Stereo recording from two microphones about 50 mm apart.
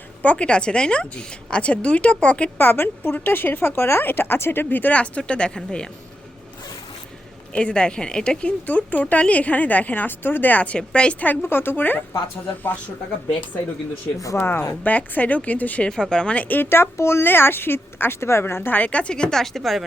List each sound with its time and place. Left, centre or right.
0.2 s speech: left
2.6 s speech: left
4.0 s speech: left
4.6 s a woman's voice: left
4.9 s speech: left
7.5 s speech: centre
8.6 s a woman's voice: left
11.4 s speech: left
14.2 s speech: left
14.8 s a woman's voice: left
15.9 s speech: centre
16.6 s speech: left
18.8 s speech: left
19.1 s speech: centre